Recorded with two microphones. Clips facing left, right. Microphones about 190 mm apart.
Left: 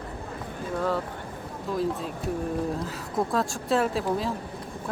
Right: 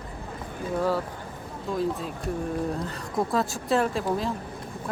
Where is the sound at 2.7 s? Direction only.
Centre (ahead or behind).